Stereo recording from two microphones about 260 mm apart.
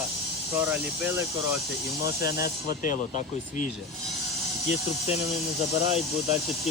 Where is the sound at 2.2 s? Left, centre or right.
Left.